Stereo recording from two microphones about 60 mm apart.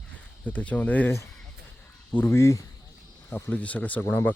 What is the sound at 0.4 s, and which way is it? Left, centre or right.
Speech, left.